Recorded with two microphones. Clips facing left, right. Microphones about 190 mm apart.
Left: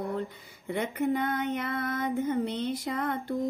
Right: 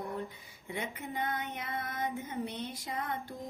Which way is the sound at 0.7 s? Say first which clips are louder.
Left 11 dB; 65° left (ahead or behind).